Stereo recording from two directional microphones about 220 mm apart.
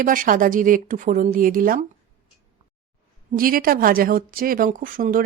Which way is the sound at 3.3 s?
40° right (ahead or behind).